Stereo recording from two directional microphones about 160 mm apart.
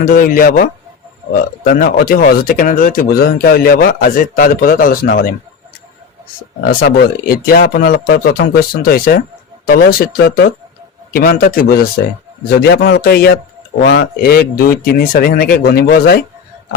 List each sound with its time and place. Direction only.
0.0 s speech: 65° left (ahead or behind)
6.7 s speech: 65° left (ahead or behind)
12.7 s a man's voice: 90° left
13.8 s speech: 90° left